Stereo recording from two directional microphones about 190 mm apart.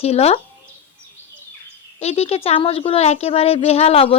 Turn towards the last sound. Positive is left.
turn(degrees=30)  # may be behind; listen again after turning